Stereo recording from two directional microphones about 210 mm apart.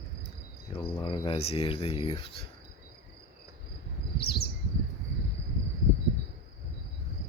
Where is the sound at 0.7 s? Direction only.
25° left (ahead or behind).